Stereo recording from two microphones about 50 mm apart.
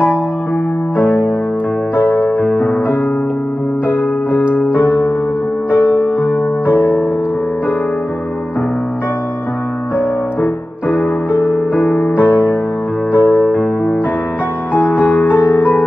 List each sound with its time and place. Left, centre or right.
0.9 s music: right
4.5 s music: right
5.8 s music: left
6.6 s music: right
9.9 s music: right
12.2 s music: right